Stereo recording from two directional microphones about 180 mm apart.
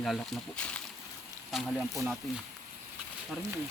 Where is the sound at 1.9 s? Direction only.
15° right (ahead or behind).